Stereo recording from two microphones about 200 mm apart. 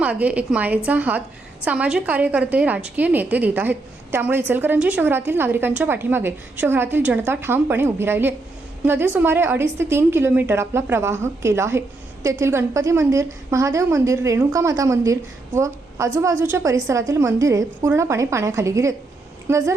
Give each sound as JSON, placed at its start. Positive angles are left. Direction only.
{"t": 0.0, "sound": "a woman's voice", "side_deg": -10}